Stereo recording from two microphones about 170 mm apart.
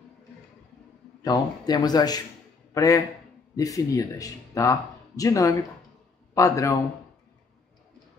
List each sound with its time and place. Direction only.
1.2 s a man's voice: 25° left (ahead or behind)